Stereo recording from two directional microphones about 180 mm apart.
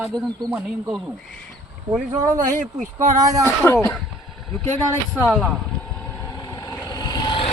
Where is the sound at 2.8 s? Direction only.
45° right (ahead or behind).